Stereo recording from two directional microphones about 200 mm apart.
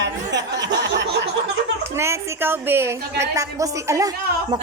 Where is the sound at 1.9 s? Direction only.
15° right (ahead or behind).